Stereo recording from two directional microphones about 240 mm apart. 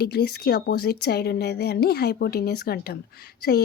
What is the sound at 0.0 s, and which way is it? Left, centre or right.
Speech, left.